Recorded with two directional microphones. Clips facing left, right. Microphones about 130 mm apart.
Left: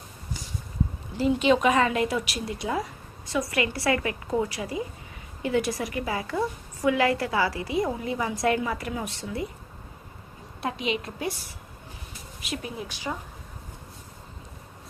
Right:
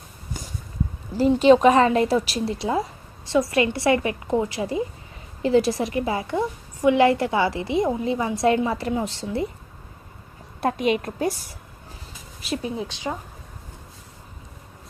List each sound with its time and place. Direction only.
1.1 s a woman's voice: 35° right (ahead or behind)
10.6 s a woman's voice: 50° right (ahead or behind); by 13.0 s 30° right (ahead or behind)